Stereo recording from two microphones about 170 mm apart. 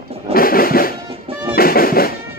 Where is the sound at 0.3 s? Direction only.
60° left (ahead or behind).